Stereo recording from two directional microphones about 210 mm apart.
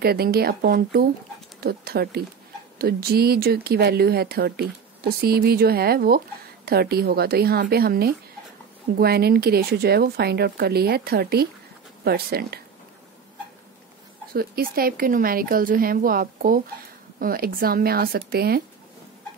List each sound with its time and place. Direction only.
0.0 s speech: 50° right (ahead or behind)
14.3 s speech: 45° right (ahead or behind)